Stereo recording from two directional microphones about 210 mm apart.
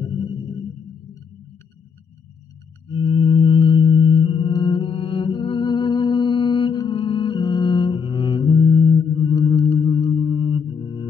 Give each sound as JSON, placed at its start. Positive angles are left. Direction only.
{"t": 0.0, "sound": "music", "side_deg": 20}
{"t": 2.9, "sound": "music", "side_deg": 25}
{"t": 8.5, "sound": "singing bowl", "side_deg": 20}
{"t": 10.0, "sound": "music", "side_deg": 25}